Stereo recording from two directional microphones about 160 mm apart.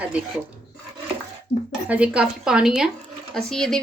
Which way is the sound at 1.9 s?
5° right (ahead or behind).